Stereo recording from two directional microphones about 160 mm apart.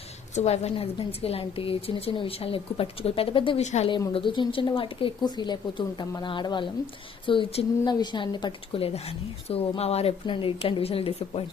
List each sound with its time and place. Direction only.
0.3 s a woman's voice: 40° left (ahead or behind)
3.6 s a woman's voice: 45° left (ahead or behind)
4.1 s a woman's voice: 30° left (ahead or behind)